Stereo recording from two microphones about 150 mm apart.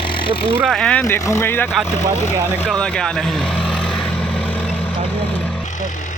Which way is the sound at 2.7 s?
5° left (ahead or behind).